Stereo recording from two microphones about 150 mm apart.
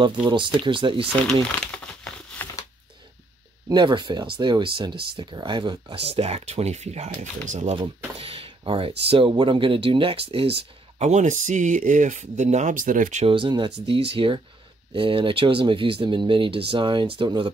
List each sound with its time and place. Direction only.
0.0 s speech: 30° right (ahead or behind)
1.2 s crumpling: 5° left (ahead or behind)
3.6 s speech: 30° right (ahead or behind); by 7.7 s 50° right (ahead or behind)
7.7 s speech: 40° right (ahead or behind)
11.0 s speech: 50° right (ahead or behind)
13.2 s speech: 35° right (ahead or behind)